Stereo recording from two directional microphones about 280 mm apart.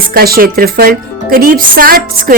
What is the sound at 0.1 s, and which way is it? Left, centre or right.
A woman's voice, right.